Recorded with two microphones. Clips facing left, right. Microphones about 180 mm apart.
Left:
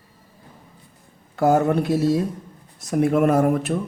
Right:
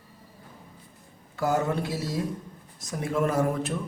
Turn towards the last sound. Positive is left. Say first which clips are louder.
# left 7 dB
turn(degrees=65)  # may be behind; listen again after turning